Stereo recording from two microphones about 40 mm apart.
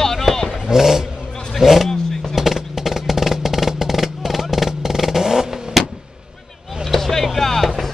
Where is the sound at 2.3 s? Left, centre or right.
Centre.